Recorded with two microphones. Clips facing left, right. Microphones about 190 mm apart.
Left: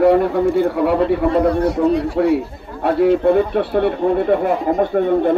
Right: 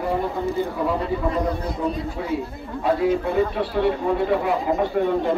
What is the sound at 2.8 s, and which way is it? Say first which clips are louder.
Speech: left 7 dB; 65° left (ahead or behind).